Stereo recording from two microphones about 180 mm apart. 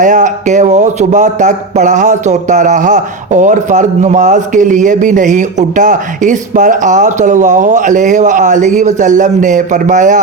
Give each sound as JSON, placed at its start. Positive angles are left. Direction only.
{"t": 0.0, "sound": "speech", "side_deg": -45}